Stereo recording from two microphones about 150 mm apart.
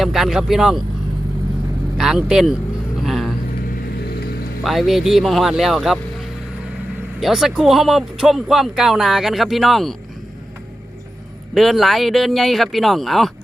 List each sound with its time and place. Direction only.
0.0 s speech: centre (ahead or behind)
2.0 s speech: 5° right (ahead or behind)
3.0 s vehicle: centre (ahead or behind)
3.7 s vehicle: 90° left
4.6 s speech: centre (ahead or behind)
7.2 s speech: centre (ahead or behind)
11.5 s speech: centre (ahead or behind)